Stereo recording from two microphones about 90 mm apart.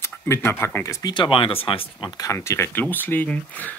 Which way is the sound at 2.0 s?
45° left (ahead or behind).